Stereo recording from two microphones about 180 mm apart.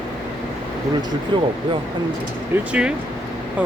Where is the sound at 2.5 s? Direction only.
10° right (ahead or behind).